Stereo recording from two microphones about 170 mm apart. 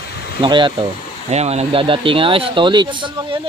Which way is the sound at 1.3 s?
40° right (ahead or behind).